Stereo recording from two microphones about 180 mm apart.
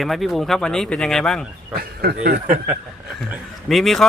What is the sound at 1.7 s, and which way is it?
Speech, 60° right (ahead or behind).